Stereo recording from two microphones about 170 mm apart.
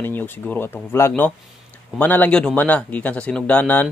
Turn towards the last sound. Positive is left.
turn(degrees=10)  # may be behind; listen again after turning